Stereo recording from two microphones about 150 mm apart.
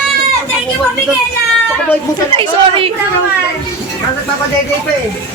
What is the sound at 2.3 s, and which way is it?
Speech, 35° right (ahead or behind).